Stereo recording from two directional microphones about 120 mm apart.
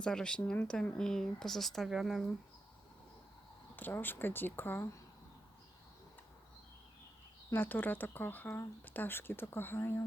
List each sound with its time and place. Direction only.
0.0 s speech: 5° left (ahead or behind)
3.8 s speech: 15° left (ahead or behind)
7.5 s speech: 15° left (ahead or behind)